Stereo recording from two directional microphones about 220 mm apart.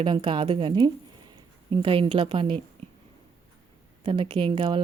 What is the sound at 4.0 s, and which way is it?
Speech, 25° right (ahead or behind).